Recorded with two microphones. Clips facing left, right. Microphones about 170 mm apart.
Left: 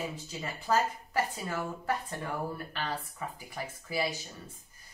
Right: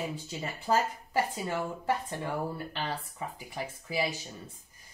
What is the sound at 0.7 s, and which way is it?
Speech, 25° right (ahead or behind).